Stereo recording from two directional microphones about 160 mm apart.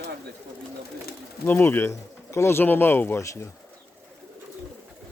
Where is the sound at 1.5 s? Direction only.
10° left (ahead or behind).